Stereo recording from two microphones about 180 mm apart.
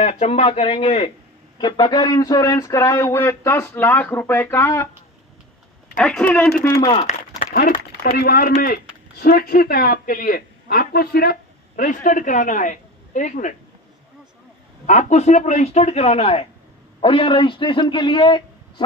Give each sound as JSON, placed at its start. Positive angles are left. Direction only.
{"t": 0.0, "sound": "speech", "side_deg": 35}
{"t": 1.6, "sound": "a sound", "side_deg": 25}
{"t": 5.9, "sound": "speech", "side_deg": 5}
{"t": 6.7, "sound": "a man's voice", "side_deg": 25}
{"t": 7.1, "sound": "speech", "side_deg": 50}
{"t": 14.9, "sound": "a man's voice", "side_deg": 40}